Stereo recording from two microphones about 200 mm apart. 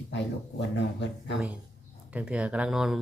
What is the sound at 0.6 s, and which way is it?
Speech, 60° left (ahead or behind).